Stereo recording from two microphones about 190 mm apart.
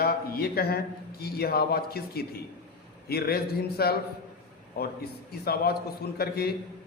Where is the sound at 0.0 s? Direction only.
55° left (ahead or behind).